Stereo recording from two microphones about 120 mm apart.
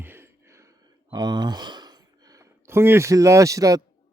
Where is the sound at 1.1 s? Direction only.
35° right (ahead or behind).